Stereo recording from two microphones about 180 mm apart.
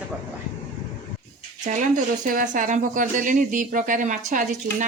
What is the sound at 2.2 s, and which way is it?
Speech, 50° right (ahead or behind).